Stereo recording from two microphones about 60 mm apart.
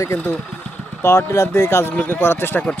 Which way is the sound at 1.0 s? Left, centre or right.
Left.